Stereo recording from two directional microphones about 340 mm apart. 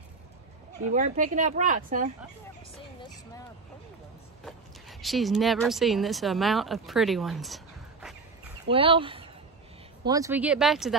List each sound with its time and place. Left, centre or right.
0.9 s speech: right
4.5 s speech: centre
8.6 s speech: centre